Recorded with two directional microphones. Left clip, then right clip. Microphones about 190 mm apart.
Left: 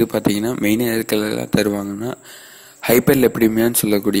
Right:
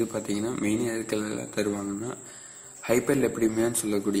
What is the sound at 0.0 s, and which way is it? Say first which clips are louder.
Speech: left 11 dB; 50° left (ahead or behind).